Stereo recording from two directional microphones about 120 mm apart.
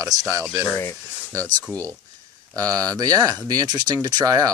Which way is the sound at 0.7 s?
20° left (ahead or behind).